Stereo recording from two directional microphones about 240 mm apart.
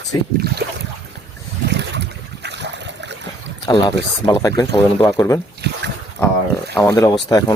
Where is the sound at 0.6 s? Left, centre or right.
Right.